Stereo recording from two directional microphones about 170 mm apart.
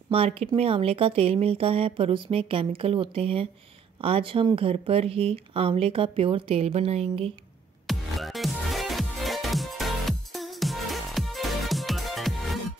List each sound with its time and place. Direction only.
0.1 s speech: 35° right (ahead or behind)
7.8 s music: centre (ahead or behind)